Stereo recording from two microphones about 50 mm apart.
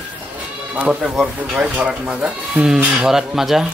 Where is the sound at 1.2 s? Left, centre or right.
Right.